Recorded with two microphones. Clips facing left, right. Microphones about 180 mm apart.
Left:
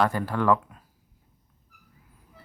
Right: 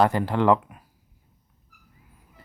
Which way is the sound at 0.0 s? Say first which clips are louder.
Right 4 dB; 25° right (ahead or behind).